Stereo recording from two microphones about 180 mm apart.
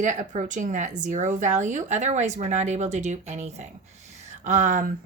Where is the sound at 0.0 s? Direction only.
45° right (ahead or behind).